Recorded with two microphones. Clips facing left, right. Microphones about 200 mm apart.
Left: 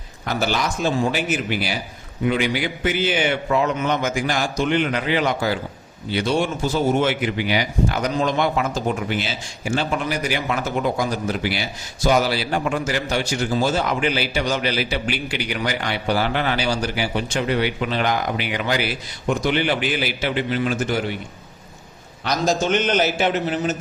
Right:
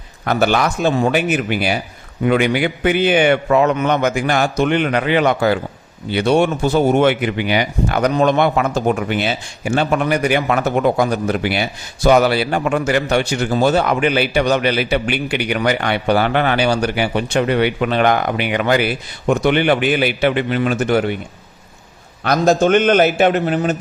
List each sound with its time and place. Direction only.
0.3 s speech: 60° right (ahead or behind)
22.2 s speech: 55° right (ahead or behind)